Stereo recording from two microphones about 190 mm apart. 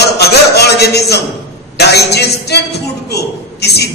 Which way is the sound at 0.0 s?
60° left (ahead or behind).